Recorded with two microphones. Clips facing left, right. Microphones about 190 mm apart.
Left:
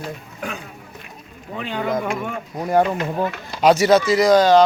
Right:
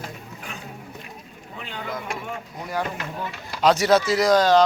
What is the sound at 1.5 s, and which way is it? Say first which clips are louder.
Speech: left 10 dB; 75° left (ahead or behind).